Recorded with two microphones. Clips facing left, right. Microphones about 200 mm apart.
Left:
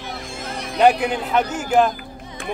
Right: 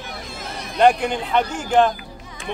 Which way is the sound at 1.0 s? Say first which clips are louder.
Left 1 dB; 5° left (ahead or behind).